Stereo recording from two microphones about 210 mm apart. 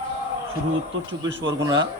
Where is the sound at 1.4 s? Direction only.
60° right (ahead or behind).